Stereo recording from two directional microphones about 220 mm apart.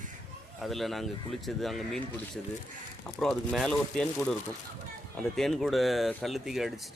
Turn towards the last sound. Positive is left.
turn(degrees=0)  # may be behind; listen again after turning